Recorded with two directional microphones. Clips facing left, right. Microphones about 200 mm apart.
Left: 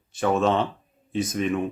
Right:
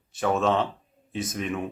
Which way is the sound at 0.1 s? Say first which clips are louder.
Left 2 dB; centre (ahead or behind).